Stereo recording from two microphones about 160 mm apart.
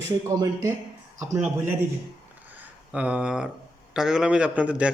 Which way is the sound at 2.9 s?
10° right (ahead or behind).